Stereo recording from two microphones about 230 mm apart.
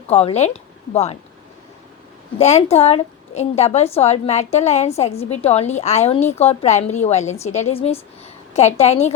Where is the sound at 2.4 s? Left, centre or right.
Left.